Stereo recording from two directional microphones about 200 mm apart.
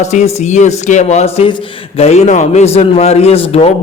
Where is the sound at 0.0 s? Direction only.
35° left (ahead or behind).